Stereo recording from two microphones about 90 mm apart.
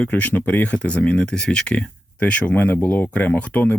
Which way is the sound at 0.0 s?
15° left (ahead or behind).